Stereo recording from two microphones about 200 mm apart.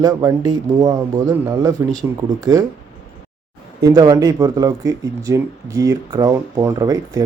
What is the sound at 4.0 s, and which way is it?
Speech, 20° right (ahead or behind).